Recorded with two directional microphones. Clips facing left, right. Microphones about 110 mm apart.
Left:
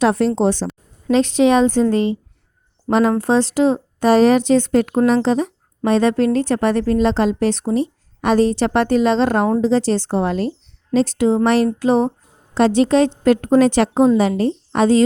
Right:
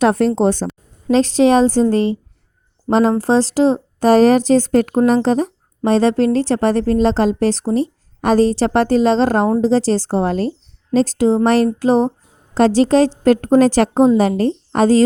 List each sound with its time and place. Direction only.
0.0 s speech: 45° right (ahead or behind)
1.1 s speech: 35° right (ahead or behind)